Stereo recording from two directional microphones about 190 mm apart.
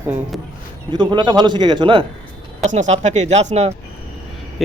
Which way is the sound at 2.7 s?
40° right (ahead or behind).